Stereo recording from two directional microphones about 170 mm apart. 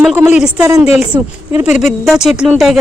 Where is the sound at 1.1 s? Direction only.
20° right (ahead or behind).